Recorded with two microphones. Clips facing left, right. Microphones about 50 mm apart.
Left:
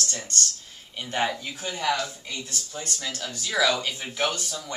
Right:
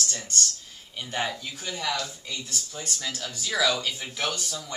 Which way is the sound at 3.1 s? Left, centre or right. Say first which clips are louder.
Right 2 dB; centre.